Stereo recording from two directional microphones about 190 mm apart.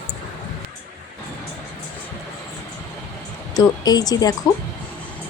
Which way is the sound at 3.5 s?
20° left (ahead or behind).